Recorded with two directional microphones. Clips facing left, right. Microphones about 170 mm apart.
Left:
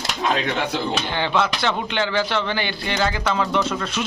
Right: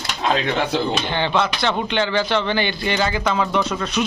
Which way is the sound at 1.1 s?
5° left (ahead or behind).